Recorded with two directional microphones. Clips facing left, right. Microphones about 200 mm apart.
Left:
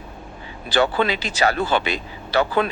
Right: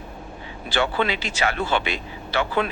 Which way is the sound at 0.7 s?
35° left (ahead or behind).